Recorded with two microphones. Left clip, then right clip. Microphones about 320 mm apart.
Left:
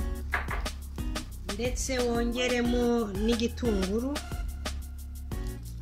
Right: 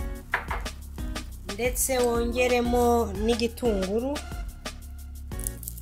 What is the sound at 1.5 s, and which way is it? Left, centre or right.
Speech, centre.